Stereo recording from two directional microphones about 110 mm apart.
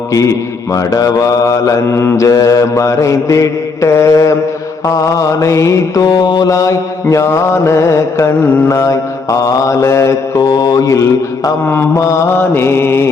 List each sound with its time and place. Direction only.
0.1 s mantra: 30° left (ahead or behind)